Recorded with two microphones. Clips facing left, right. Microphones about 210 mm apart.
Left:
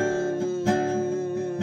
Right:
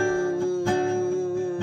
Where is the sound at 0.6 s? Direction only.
15° left (ahead or behind).